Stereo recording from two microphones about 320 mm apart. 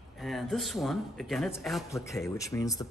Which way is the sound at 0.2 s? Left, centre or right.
Centre.